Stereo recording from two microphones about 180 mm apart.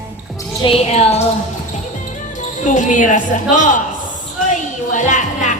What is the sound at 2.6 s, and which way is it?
A woman's voice, 45° left (ahead or behind).